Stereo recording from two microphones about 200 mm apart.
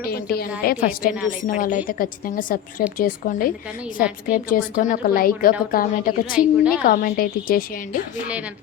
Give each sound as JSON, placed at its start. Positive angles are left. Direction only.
{"t": 0.0, "sound": "a woman's voice", "side_deg": 50}
{"t": 6.4, "sound": "a woman's voice", "side_deg": -5}
{"t": 6.8, "sound": "a woman's voice", "side_deg": 45}